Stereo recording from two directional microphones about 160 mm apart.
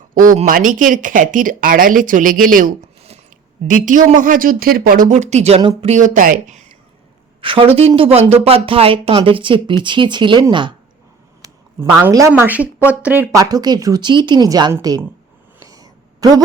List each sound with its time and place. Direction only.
0.1 s speech: 60° right (ahead or behind); by 6.0 s 35° right (ahead or behind)
6.0 s speech: 60° right (ahead or behind)
7.4 s a woman's voice: 35° right (ahead or behind)
11.9 s speech: 10° right (ahead or behind)
13.4 s a woman's voice: 25° right (ahead or behind)
15.6 s a sound: 25° right (ahead or behind)